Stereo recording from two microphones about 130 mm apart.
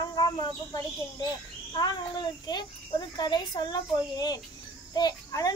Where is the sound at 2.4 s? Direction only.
35° left (ahead or behind).